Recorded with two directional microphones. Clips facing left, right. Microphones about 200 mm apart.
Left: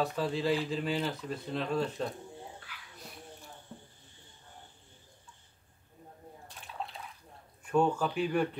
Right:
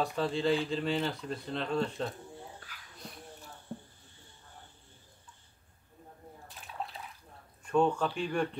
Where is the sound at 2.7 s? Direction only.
40° right (ahead or behind).